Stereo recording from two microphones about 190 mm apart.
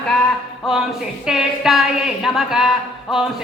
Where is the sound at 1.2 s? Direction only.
Centre (ahead or behind).